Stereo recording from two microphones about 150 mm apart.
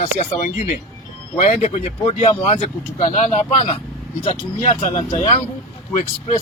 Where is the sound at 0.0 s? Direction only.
50° left (ahead or behind).